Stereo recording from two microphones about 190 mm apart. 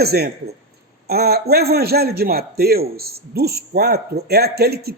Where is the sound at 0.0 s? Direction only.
55° right (ahead or behind).